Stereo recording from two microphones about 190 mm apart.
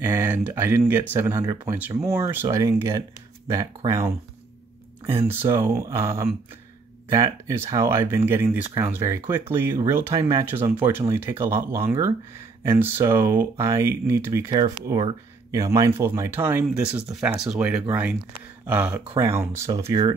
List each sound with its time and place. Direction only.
0.0 s speech: 15° right (ahead or behind)
5.3 s speech: 15° right (ahead or behind)